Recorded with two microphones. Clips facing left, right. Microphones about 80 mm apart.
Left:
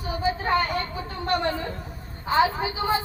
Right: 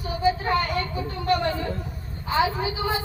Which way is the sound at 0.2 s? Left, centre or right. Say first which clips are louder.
Right 1 dB; left.